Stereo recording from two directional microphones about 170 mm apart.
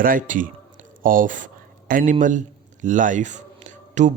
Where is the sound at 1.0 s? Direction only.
55° right (ahead or behind).